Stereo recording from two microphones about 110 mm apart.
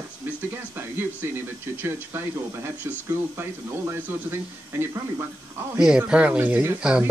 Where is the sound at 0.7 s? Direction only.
20° right (ahead or behind).